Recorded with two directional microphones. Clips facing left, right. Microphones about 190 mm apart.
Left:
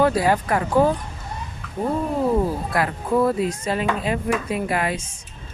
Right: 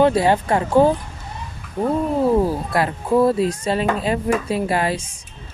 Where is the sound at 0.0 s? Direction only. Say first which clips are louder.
Right 3 dB; 25° right (ahead or behind).